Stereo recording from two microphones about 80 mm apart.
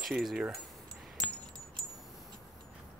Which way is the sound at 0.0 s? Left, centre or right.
Centre.